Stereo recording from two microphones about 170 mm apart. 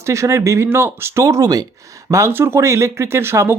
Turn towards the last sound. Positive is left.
turn(degrees=-15)  # may be behind; listen again after turning